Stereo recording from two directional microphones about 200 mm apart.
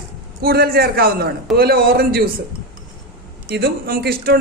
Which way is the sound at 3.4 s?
50° right (ahead or behind).